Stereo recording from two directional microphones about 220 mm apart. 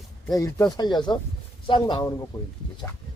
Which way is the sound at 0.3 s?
15° left (ahead or behind).